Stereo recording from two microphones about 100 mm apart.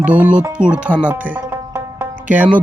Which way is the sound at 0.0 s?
15° right (ahead or behind).